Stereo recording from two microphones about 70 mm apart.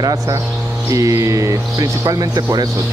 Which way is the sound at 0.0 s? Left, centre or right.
Right.